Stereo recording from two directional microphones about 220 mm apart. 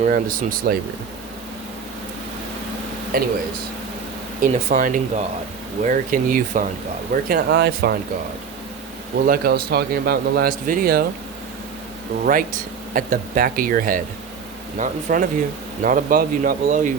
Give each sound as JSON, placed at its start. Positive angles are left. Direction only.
{"t": 0.1, "sound": "speech", "side_deg": -40}
{"t": 3.1, "sound": "speech", "side_deg": -40}
{"t": 4.4, "sound": "speech", "side_deg": -35}
{"t": 9.2, "sound": "speech", "side_deg": -40}
{"t": 12.2, "sound": "speech", "side_deg": -40}